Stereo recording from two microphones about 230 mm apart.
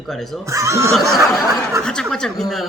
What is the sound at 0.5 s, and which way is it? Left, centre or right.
Speech, centre.